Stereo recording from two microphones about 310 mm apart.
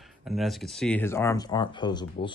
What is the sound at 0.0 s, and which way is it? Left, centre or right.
Speech, centre.